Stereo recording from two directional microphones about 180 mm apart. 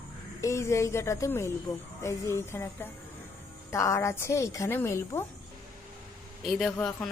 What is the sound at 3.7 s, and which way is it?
A woman's voice, 15° left (ahead or behind).